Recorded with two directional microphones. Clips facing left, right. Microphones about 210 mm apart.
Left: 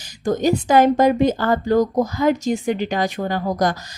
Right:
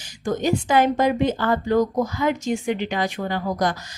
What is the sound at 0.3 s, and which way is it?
Speech, 40° left (ahead or behind).